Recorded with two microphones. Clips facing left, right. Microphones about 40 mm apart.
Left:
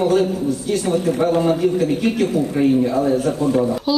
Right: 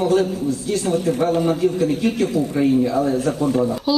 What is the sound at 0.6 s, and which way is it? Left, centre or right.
A man's voice, left.